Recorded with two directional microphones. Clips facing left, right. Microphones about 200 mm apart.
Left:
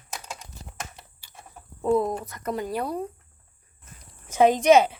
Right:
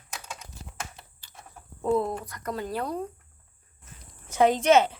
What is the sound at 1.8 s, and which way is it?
Speech, 10° left (ahead or behind).